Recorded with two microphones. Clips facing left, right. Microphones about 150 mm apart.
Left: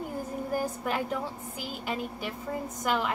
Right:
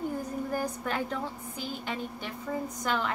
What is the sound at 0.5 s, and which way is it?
A woman's voice, 10° left (ahead or behind).